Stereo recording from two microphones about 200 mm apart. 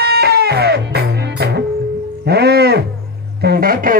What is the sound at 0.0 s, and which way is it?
Music, 55° right (ahead or behind).